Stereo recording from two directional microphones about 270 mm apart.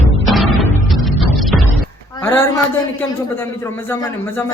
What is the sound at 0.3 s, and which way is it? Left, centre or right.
Music, centre.